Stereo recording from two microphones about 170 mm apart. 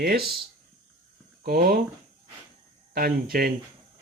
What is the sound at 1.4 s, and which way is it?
Speech, 60° right (ahead or behind).